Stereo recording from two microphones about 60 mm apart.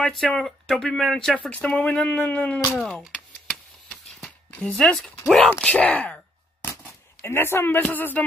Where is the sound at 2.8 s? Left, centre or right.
Centre.